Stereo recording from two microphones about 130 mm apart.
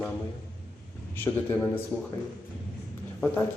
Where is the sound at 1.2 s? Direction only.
15° left (ahead or behind).